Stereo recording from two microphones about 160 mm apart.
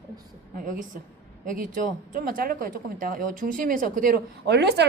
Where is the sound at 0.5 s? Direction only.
60° right (ahead or behind).